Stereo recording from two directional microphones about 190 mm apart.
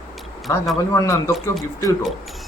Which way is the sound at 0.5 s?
15° left (ahead or behind).